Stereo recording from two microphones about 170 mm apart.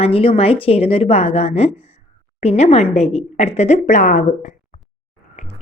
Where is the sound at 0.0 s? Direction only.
35° left (ahead or behind).